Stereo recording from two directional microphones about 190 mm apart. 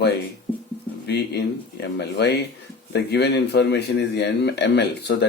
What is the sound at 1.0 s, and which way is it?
Speech, 60° left (ahead or behind).